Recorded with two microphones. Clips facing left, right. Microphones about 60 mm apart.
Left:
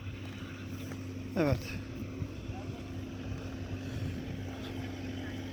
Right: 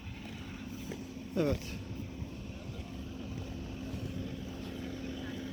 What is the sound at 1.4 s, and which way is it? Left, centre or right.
Speech, left.